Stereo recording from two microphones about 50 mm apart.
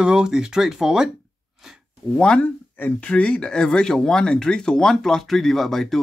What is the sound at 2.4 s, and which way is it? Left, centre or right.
Speech, left.